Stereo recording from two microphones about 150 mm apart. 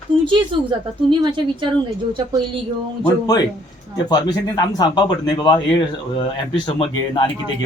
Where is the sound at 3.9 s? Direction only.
25° left (ahead or behind).